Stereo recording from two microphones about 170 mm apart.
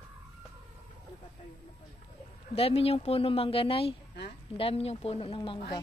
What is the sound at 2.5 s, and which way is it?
Speech, 35° left (ahead or behind).